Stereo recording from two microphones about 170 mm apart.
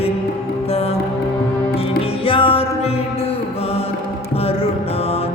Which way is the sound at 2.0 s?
30° left (ahead or behind).